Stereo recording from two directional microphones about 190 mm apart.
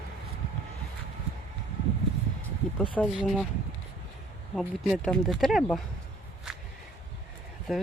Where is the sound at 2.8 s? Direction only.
5° left (ahead or behind).